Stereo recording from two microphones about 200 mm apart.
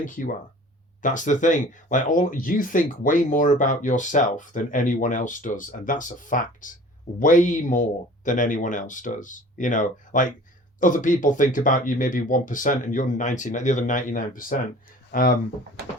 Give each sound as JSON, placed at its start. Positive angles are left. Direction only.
{"t": 0.0, "sound": "speech", "side_deg": 40}